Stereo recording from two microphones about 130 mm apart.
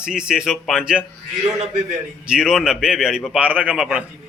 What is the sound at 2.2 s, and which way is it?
A man's voice, 5° right (ahead or behind).